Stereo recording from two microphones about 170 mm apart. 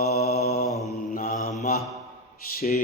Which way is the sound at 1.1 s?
55° left (ahead or behind).